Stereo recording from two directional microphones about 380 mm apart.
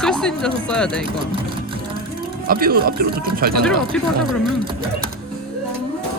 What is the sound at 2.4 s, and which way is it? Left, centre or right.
Speech, right.